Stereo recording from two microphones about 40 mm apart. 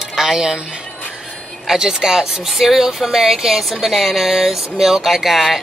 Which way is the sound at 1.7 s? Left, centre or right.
Centre.